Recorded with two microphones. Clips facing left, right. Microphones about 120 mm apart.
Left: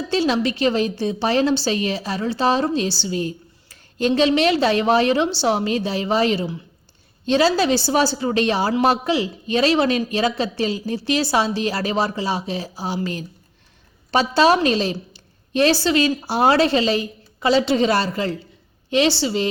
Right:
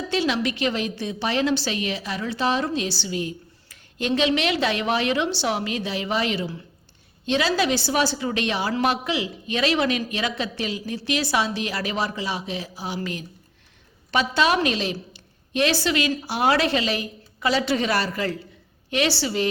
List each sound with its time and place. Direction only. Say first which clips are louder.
0.1 s a woman's voice: left 4 dB; 35° left (ahead or behind)